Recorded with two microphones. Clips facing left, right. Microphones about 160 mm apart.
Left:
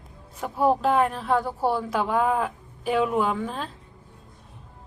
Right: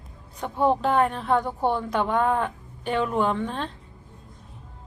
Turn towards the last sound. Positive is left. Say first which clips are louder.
# right 1 dB
turn(degrees=5)  # may be behind; listen again after turning